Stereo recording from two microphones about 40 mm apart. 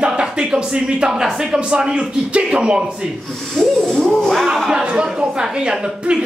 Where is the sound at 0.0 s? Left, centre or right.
Right.